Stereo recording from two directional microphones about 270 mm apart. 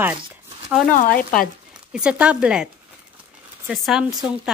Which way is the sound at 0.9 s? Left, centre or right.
Left.